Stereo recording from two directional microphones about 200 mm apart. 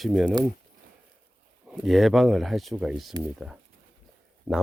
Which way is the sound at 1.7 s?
Centre (ahead or behind).